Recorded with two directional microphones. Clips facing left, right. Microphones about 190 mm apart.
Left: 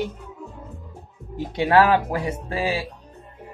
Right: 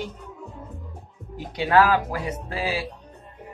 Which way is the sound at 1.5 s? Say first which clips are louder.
Left 2 dB; 25° left (ahead or behind).